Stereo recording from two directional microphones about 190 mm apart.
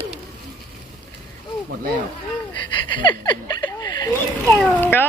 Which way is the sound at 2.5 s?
25° left (ahead or behind).